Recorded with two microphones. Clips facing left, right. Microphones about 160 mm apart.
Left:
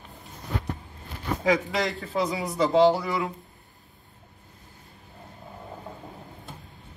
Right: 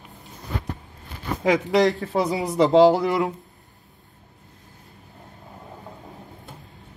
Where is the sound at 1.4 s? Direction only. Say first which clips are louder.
Right 6 dB; 70° right (ahead or behind).